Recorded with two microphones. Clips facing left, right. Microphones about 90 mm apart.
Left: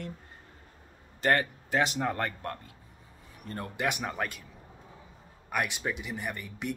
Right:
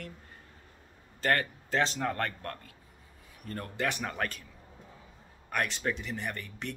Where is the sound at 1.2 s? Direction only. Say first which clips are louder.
Left 2 dB; 20° left (ahead or behind).